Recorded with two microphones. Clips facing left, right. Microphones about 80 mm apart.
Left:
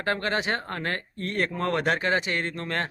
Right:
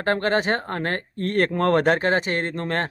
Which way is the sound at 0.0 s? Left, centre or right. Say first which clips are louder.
Right 5 dB; right.